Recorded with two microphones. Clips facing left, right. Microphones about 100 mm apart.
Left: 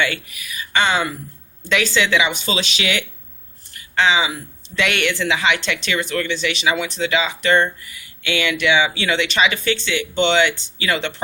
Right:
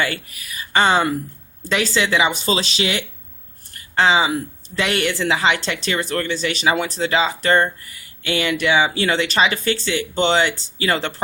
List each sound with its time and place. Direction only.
0.0 s speech: 40° right (ahead or behind)